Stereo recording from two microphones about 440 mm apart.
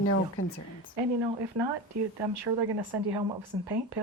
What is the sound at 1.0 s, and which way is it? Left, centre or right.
A woman's voice, right.